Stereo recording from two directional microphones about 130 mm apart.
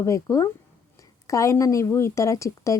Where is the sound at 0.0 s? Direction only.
25° left (ahead or behind).